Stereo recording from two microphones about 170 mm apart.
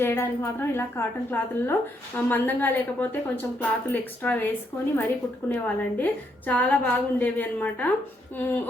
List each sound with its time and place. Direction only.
0.0 s a woman's voice: 15° left (ahead or behind)
5.5 s a woman's voice: 10° left (ahead or behind)